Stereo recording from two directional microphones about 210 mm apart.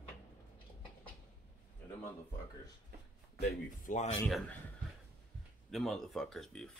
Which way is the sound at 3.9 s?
40° left (ahead or behind).